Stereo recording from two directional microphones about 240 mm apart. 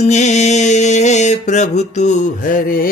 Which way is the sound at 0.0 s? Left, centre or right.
Left.